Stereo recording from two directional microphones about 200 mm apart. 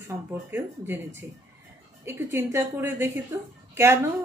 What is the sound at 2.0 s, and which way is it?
Speech, 15° right (ahead or behind).